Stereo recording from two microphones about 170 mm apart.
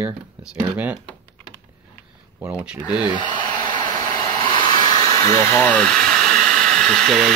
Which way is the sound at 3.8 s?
50° right (ahead or behind).